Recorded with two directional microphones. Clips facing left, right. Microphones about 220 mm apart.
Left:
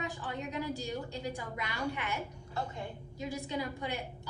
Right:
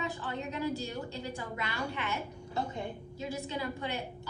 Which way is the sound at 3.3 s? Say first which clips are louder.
Even; 15° left (ahead or behind).